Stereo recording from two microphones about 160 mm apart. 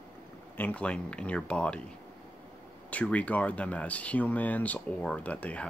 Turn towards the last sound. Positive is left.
turn(degrees=10)  # may be behind; listen again after turning